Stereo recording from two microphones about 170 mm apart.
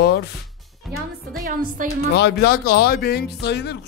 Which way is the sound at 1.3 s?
60° right (ahead or behind).